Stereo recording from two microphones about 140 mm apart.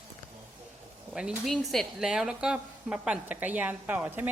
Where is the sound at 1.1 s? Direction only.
5° right (ahead or behind).